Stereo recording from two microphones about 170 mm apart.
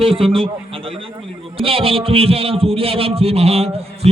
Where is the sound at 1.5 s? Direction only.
35° right (ahead or behind).